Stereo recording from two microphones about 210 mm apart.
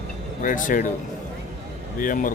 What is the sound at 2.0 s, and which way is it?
Speech, 40° left (ahead or behind).